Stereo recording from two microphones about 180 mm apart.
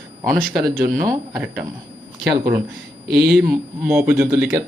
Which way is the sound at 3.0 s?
60° right (ahead or behind).